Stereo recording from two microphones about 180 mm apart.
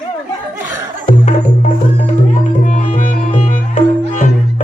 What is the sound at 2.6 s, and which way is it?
Music, 45° left (ahead or behind).